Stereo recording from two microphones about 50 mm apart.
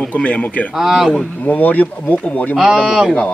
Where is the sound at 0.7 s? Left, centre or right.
Centre.